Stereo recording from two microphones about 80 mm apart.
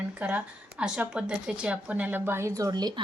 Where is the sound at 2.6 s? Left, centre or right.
Right.